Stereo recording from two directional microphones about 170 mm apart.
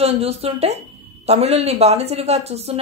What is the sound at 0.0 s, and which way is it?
A woman's voice, 35° right (ahead or behind).